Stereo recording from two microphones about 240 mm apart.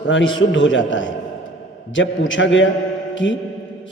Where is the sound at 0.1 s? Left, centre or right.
Left.